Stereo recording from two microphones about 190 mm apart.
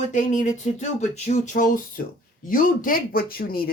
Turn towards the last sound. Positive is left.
turn(degrees=50)  # may be behind; listen again after turning